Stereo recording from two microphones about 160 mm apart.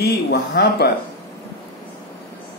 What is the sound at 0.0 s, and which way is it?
Speech, 90° left.